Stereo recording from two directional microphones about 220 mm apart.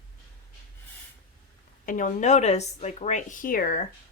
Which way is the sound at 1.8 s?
35° left (ahead or behind).